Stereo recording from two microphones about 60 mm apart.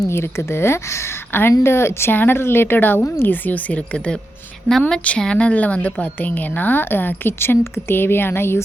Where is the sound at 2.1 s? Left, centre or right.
Left.